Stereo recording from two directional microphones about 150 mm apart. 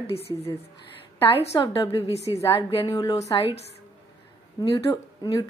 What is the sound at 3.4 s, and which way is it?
Speech, 40° left (ahead or behind).